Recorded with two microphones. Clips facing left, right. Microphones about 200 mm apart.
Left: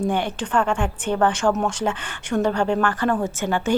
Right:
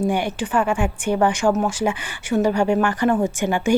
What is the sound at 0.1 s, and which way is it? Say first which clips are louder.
Speech: right 1 dB; 10° right (ahead or behind).